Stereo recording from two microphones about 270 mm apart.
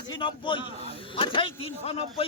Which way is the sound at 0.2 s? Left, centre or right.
Centre.